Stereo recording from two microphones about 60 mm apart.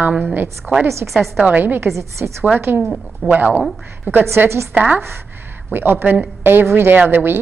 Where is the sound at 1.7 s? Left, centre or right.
Right.